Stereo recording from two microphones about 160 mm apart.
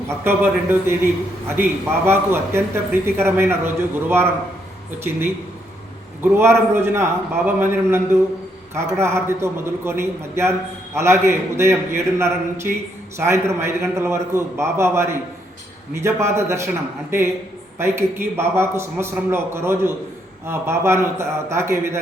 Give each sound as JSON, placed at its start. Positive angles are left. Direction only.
{"t": 0.1, "sound": "speech", "side_deg": -15}
{"t": 6.2, "sound": "speech", "side_deg": -15}